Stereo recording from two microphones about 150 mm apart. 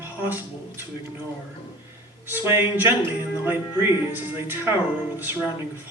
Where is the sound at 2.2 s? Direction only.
15° right (ahead or behind).